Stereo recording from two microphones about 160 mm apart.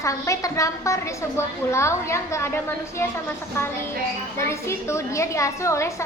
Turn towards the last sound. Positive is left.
turn(degrees=20)  # may be behind; listen again after turning